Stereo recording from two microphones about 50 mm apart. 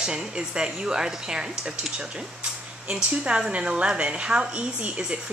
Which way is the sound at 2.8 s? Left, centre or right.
Centre.